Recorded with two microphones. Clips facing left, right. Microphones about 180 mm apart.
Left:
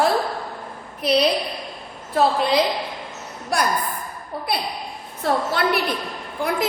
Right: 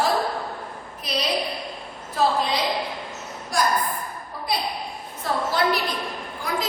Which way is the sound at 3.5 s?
65° left (ahead or behind).